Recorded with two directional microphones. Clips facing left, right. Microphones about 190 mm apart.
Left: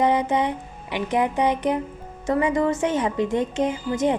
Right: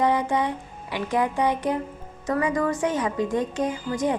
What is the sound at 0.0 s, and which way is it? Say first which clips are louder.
A woman's voice: left 2 dB; 20° left (ahead or behind).